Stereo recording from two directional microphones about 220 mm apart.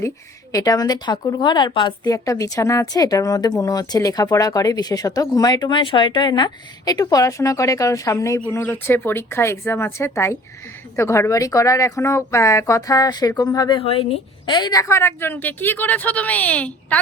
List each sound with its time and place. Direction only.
0.5 s a woman's voice: 15° left (ahead or behind)